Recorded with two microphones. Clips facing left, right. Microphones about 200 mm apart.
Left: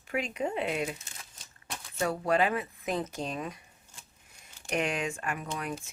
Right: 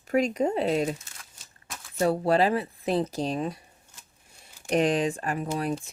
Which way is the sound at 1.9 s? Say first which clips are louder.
Right 5 dB; 35° right (ahead or behind).